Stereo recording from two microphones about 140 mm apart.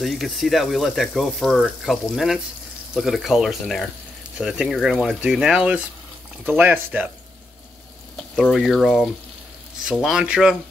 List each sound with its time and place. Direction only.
0.0 s speech: centre (ahead or behind)
8.4 s speech: centre (ahead or behind)